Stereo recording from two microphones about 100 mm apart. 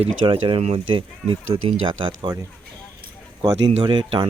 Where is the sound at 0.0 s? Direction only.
65° right (ahead or behind).